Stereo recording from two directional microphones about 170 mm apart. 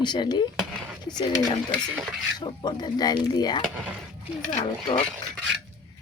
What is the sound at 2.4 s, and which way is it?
Speech, 25° left (ahead or behind).